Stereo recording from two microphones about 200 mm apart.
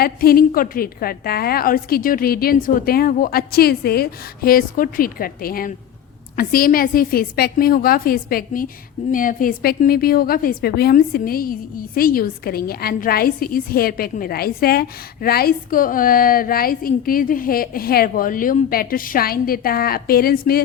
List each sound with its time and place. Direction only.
0.0 s a woman's voice: 50° left (ahead or behind)